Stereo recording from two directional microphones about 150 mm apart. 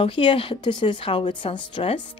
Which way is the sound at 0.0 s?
35° left (ahead or behind).